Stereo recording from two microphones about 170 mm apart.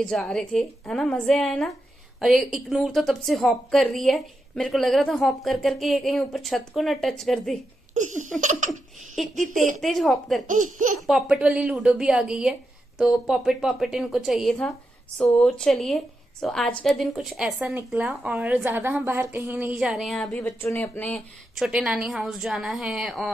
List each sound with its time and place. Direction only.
0.0 s a woman's voice: 5° left (ahead or behind)
7.9 s laughter: 45° right (ahead or behind)
8.4 s speech: 45° right (ahead or behind)
9.1 s a sound: centre (ahead or behind)
9.4 s speech: 50° right (ahead or behind)
9.8 s a woman's voice: centre (ahead or behind)
10.4 s speech: 50° right (ahead or behind)
11.1 s a woman's voice: 5° right (ahead or behind)
20.4 s speech: 15° left (ahead or behind)
21.5 s a woman's voice: centre (ahead or behind)